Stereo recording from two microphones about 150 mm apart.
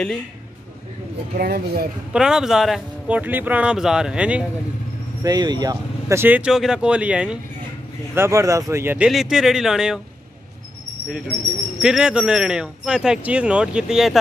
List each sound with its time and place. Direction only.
1.3 s speech: 85° right
2.1 s speech: 5° right (ahead or behind)
5.2 s speech: 25° right (ahead or behind); by 7.3 s 5° right (ahead or behind)
8.1 s speech: 15° right (ahead or behind)
11.8 s speech: 5° right (ahead or behind)